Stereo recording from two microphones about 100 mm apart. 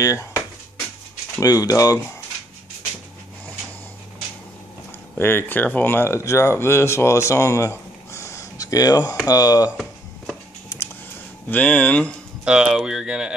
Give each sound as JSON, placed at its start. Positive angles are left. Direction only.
{"t": 0.0, "sound": "speech", "side_deg": 30}
{"t": 1.4, "sound": "speech", "side_deg": 35}
{"t": 5.1, "sound": "speech", "side_deg": 20}
{"t": 11.4, "sound": "speech", "side_deg": 15}
{"t": 12.4, "sound": "speech", "side_deg": -10}